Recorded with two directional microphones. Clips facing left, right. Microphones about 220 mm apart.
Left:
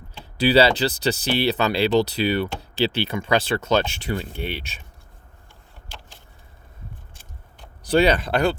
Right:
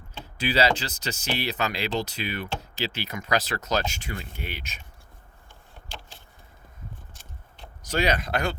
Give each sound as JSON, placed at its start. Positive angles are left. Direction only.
{"t": 0.3, "sound": "speech", "side_deg": 35}
{"t": 7.9, "sound": "speech", "side_deg": 30}